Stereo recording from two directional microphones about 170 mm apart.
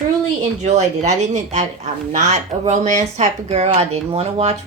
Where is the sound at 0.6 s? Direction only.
40° right (ahead or behind).